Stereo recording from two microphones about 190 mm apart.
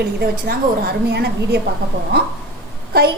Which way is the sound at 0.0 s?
55° right (ahead or behind).